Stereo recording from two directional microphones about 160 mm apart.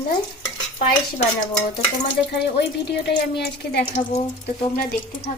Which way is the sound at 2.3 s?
90° left.